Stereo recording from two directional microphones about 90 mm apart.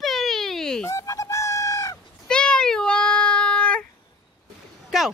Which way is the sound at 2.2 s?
10° left (ahead or behind).